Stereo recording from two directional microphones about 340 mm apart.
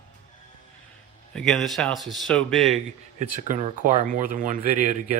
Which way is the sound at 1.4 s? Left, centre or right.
Centre.